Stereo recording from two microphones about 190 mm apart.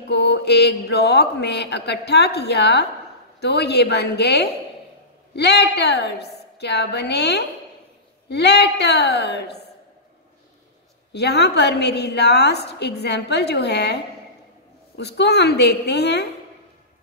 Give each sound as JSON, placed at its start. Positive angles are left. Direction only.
{"t": 0.1, "sound": "a woman's voice", "side_deg": 65}
{"t": 11.1, "sound": "a woman's voice", "side_deg": 60}